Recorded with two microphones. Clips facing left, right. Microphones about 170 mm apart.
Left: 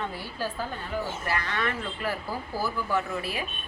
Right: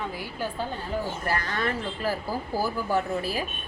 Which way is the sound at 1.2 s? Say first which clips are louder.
Right 2 dB; 40° right (ahead or behind).